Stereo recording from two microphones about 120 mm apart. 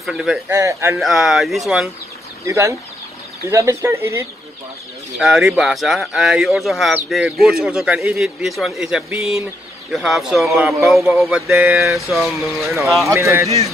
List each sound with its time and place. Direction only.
0.0 s speech: centre (ahead or behind)
0.5 s speech: 25° right (ahead or behind)
0.9 s speech: centre (ahead or behind)
2.4 s speech: 25° right (ahead or behind)
5.2 s speech: centre (ahead or behind)
13.1 s speech: 25° right (ahead or behind)